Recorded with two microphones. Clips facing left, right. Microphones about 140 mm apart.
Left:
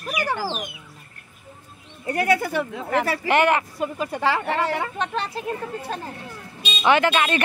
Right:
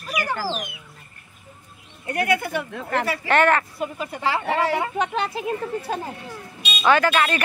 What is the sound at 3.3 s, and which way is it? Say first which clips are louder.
Speech: right 1 dB; 15° left (ahead or behind).